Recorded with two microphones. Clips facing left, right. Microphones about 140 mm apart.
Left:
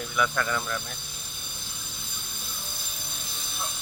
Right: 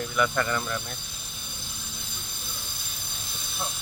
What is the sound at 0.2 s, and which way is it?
Speech, centre (ahead or behind).